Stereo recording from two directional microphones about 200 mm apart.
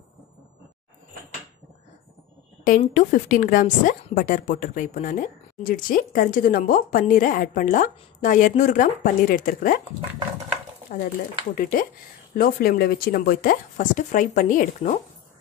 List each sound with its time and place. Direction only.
2.6 s a woman's voice: 40° left (ahead or behind)
11.5 s speech: 45° left (ahead or behind)